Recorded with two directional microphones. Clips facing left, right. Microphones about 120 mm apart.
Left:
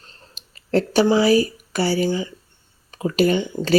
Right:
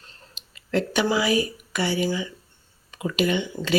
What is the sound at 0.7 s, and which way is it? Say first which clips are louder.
Speech: left 6 dB; 35° left (ahead or behind).